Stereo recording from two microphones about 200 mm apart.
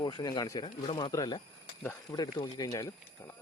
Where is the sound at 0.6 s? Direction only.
35° left (ahead or behind).